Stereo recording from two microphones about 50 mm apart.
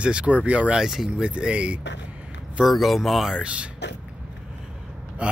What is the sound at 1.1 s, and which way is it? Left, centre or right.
Speech, right.